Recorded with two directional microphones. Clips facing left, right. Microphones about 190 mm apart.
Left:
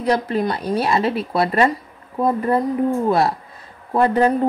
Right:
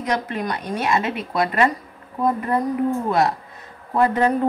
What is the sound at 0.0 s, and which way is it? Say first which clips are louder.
Speech: left 5 dB; 30° left (ahead or behind).